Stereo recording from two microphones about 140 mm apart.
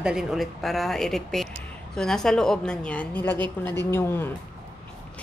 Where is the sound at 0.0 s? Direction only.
5° right (ahead or behind); by 4.3 s 15° left (ahead or behind).